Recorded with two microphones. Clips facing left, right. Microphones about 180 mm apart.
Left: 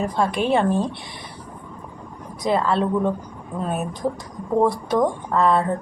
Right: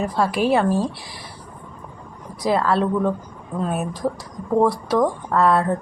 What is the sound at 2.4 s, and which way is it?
Speech, 5° right (ahead or behind).